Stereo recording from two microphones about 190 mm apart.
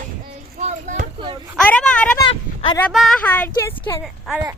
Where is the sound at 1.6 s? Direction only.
5° left (ahead or behind).